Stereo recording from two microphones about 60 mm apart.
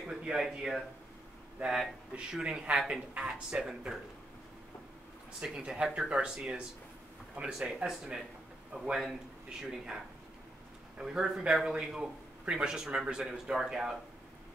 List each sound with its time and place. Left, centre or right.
0.1 s a man's voice: centre
5.4 s a man's voice: centre